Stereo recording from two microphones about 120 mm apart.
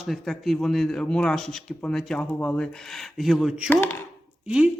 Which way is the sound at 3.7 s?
20° left (ahead or behind).